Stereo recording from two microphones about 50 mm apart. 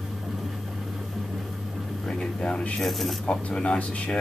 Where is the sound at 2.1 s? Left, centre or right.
Centre.